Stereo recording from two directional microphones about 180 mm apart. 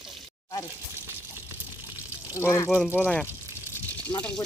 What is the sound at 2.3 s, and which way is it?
Speech, 15° left (ahead or behind).